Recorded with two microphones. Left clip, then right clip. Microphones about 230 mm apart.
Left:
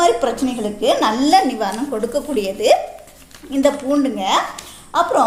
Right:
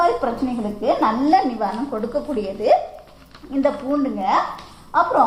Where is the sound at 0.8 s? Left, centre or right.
Left.